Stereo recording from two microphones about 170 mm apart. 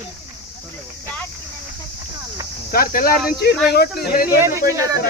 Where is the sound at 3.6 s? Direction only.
70° left (ahead or behind).